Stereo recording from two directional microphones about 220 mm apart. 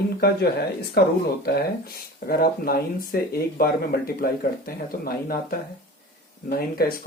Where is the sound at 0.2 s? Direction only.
45° left (ahead or behind).